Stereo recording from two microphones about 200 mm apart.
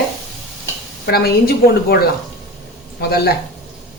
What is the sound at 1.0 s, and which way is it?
Speech, 50° left (ahead or behind).